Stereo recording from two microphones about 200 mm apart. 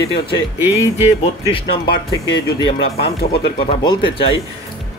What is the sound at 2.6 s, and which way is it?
Speech, 30° left (ahead or behind).